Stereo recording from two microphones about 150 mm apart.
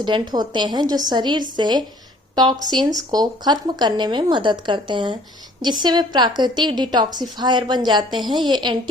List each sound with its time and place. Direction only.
0.0 s speech: 30° right (ahead or behind)